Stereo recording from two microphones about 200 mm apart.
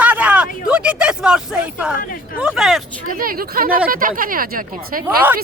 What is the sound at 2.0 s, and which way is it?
Speech, 45° left (ahead or behind).